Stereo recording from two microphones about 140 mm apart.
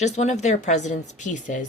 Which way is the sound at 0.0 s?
55° left (ahead or behind).